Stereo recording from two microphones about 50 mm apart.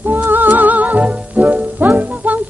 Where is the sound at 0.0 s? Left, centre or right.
Right.